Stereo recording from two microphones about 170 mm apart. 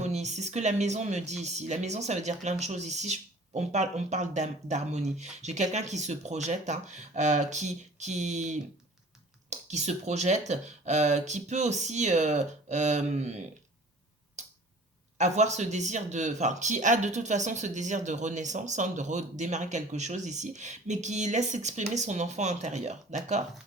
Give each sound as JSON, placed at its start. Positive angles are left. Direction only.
{"t": 0.0, "sound": "speech", "side_deg": -40}
{"t": 15.2, "sound": "speech", "side_deg": -45}